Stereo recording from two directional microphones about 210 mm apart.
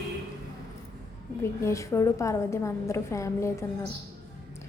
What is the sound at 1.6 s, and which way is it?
A woman's voice, 15° left (ahead or behind).